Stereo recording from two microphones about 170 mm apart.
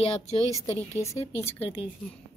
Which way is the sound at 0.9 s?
15° left (ahead or behind).